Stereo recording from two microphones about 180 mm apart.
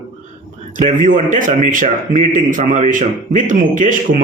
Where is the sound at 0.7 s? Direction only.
45° right (ahead or behind).